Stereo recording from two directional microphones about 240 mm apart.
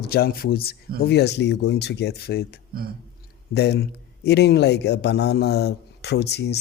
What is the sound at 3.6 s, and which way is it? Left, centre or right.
Speech, left.